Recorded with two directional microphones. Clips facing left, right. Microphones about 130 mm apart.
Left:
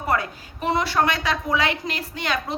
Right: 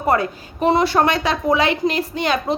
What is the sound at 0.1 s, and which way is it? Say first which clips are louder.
Speech: right 6 dB; 30° right (ahead or behind).